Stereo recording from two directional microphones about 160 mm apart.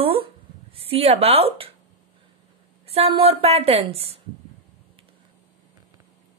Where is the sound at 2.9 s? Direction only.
35° right (ahead or behind).